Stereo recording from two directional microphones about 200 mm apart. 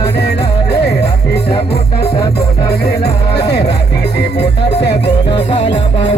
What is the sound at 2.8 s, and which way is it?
Music, 55° left (ahead or behind).